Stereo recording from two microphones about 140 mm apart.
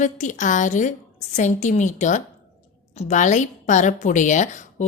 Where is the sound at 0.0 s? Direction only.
60° left (ahead or behind).